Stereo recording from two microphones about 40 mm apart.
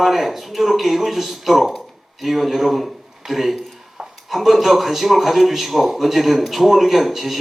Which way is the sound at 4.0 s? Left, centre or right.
Right.